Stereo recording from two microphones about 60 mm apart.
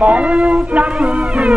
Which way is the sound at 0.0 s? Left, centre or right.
Right.